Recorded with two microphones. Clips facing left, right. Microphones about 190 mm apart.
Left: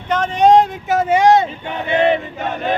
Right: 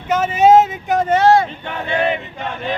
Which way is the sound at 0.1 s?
5° right (ahead or behind).